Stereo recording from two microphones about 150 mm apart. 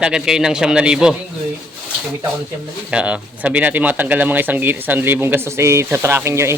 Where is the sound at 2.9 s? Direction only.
5° right (ahead or behind).